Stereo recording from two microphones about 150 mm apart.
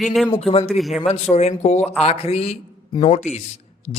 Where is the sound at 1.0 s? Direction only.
45° left (ahead or behind).